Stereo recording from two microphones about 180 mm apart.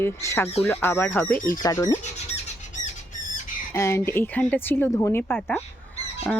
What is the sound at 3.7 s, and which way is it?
Speech, 15° left (ahead or behind).